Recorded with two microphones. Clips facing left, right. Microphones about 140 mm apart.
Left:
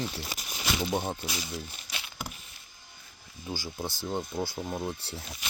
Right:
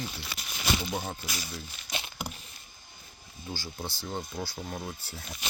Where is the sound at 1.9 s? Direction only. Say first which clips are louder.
Right 8 dB; 25° right (ahead or behind).